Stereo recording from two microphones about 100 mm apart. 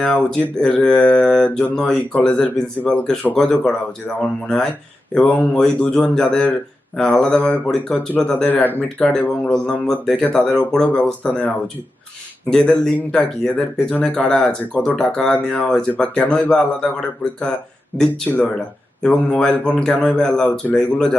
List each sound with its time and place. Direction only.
0.0 s speech: 5° left (ahead or behind)